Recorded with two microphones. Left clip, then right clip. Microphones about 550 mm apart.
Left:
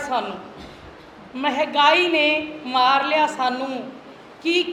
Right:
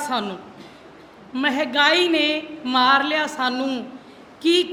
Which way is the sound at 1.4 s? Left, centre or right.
Right.